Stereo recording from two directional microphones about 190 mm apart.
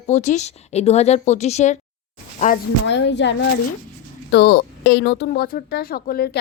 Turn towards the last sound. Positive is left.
turn(degrees=50)  # may be behind; listen again after turning